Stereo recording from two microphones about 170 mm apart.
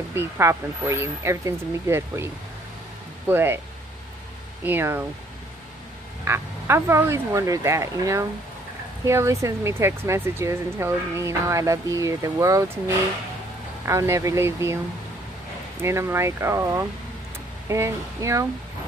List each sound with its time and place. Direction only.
0.1 s speech: 15° right (ahead or behind)
4.6 s speech: 15° right (ahead or behind)
6.2 s speech: 15° right (ahead or behind)
15.8 s speech: 15° right (ahead or behind)